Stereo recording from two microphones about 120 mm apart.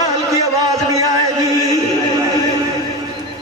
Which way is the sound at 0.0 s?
30° right (ahead or behind).